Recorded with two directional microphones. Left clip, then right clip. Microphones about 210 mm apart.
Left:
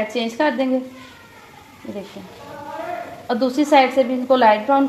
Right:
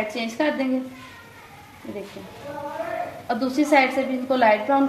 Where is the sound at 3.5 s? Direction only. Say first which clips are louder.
Left 4 dB; 30° left (ahead or behind).